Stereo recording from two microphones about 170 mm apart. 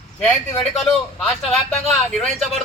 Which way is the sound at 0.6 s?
5° left (ahead or behind).